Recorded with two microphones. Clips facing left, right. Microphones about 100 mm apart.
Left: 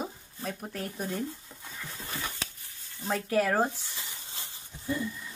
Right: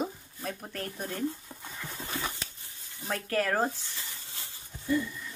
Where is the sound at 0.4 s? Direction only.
5° left (ahead or behind).